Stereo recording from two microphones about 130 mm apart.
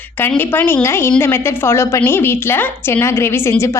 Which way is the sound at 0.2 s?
15° left (ahead or behind).